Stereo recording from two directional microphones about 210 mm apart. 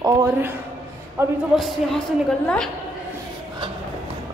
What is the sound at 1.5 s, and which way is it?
Speech, centre (ahead or behind).